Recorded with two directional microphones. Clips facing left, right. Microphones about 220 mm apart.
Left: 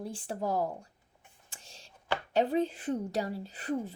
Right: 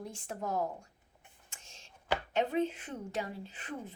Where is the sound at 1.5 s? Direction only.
35° left (ahead or behind).